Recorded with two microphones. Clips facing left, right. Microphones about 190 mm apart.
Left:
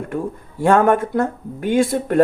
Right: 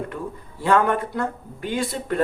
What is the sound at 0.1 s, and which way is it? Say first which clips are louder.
Speech: left 7 dB; 45° left (ahead or behind).